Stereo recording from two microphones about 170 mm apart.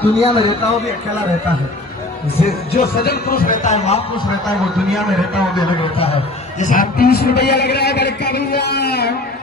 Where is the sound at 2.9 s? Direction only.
65° left (ahead or behind); by 4.5 s 25° left (ahead or behind).